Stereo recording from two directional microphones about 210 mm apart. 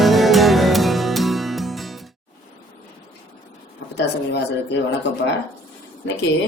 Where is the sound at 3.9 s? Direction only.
55° left (ahead or behind).